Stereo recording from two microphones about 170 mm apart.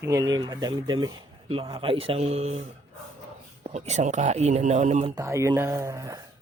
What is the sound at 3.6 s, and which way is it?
Speech, 40° right (ahead or behind).